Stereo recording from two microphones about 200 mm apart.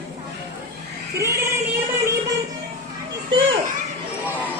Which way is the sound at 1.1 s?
15° right (ahead or behind).